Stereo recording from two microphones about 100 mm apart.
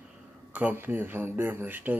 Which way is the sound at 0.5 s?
15° right (ahead or behind).